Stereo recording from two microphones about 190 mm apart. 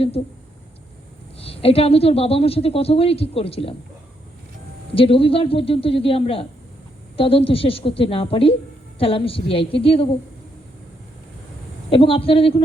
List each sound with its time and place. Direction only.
0.2 s a woman's voice: 30° left (ahead or behind)
1.4 s a woman's voice: 30° left (ahead or behind)
4.9 s a woman's voice: 30° left (ahead or behind)
11.9 s a woman's voice: 30° left (ahead or behind)